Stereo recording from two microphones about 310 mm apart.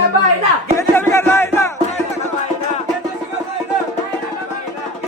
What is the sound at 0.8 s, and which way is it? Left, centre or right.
Music, centre.